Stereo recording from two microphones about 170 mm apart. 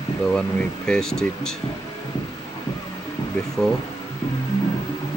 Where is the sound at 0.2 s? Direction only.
5° left (ahead or behind).